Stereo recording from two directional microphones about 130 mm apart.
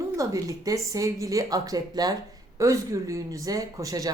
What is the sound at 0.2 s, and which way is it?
Speech, 25° right (ahead or behind).